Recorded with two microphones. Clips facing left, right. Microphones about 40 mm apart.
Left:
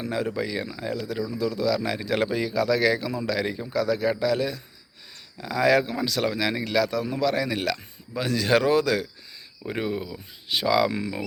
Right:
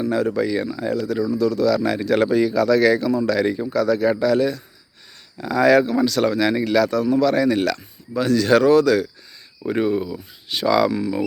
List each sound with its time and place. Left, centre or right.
0.3 s speech: centre
9.6 s speech: centre